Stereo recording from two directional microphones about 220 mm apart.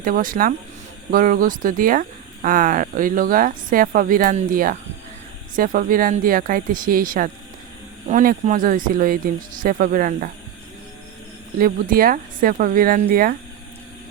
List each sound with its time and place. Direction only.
0.0 s speech: 40° right (ahead or behind)
11.5 s speech: 40° right (ahead or behind)